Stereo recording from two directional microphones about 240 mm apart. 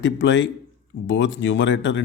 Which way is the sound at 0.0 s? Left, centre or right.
Left.